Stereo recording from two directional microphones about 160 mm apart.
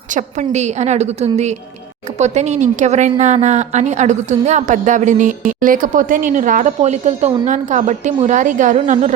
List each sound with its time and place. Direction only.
0.1 s a woman's voice: 50° right (ahead or behind)